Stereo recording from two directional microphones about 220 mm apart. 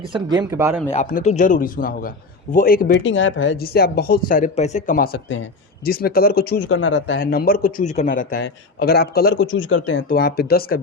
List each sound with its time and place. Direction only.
0.1 s speech: 20° right (ahead or behind)
0.9 s a man's voice: 30° left (ahead or behind)
3.0 s a man's voice: 60° left (ahead or behind)
3.6 s speech: 45° left (ahead or behind)
5.9 s speech: 40° left (ahead or behind)
6.7 s a man's voice: 60° left (ahead or behind)
7.2 s a man's voice: 40° left (ahead or behind)
8.4 s a man's voice: 50° left (ahead or behind)
10.1 s speech: 45° left (ahead or behind)